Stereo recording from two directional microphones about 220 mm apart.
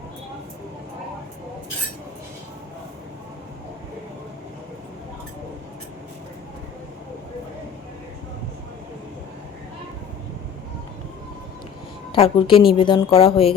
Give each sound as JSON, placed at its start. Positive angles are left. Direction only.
{"t": 12.1, "sound": "a woman's voice", "side_deg": 25}